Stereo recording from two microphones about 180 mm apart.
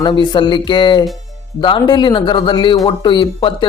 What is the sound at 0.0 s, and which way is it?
Speech, 25° left (ahead or behind).